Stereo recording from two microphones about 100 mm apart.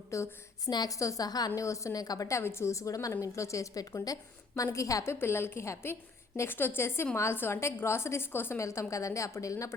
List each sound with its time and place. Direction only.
0.1 s a woman's voice: 30° left (ahead or behind)